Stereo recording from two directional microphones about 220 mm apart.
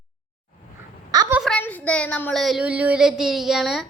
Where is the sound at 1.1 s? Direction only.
15° right (ahead or behind).